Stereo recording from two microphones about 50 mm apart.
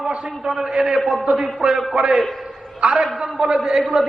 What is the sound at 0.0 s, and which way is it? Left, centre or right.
A man's voice, centre.